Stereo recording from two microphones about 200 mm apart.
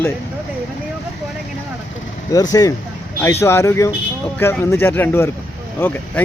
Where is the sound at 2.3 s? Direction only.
15° left (ahead or behind).